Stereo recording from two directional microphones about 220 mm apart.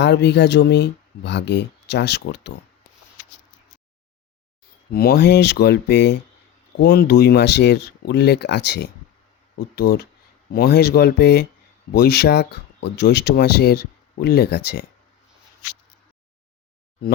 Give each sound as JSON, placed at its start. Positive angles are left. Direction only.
{"t": 0.0, "sound": "speech", "side_deg": 50}
{"t": 4.9, "sound": "speech", "side_deg": 45}